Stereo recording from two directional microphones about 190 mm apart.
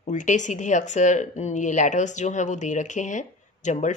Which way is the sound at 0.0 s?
40° left (ahead or behind).